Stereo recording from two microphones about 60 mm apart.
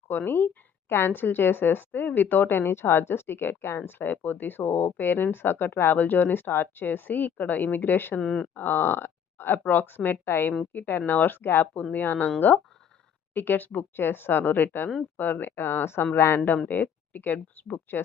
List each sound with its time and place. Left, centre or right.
0.1 s speech: left
8.2 s speech: centre
8.5 s speech: left
13.3 s speech: left